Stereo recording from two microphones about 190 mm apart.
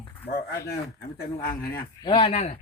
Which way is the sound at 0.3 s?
55° left (ahead or behind).